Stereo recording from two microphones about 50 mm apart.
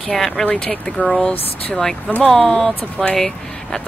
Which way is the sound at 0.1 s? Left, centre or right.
Centre.